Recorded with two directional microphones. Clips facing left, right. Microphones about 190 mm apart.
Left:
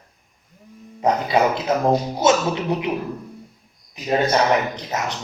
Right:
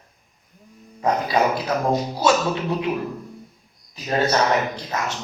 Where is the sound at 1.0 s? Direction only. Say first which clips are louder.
Left 2 dB; 25° left (ahead or behind).